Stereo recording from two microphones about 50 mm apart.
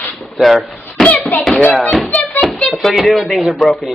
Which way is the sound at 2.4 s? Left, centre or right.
Centre.